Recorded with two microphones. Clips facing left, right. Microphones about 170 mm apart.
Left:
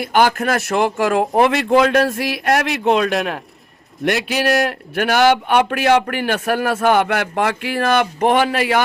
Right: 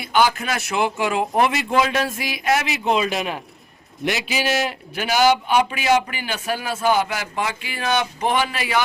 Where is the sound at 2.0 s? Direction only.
Centre (ahead or behind).